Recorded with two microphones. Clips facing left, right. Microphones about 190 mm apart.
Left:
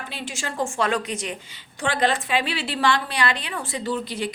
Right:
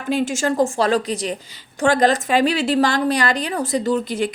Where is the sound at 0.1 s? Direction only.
45° right (ahead or behind).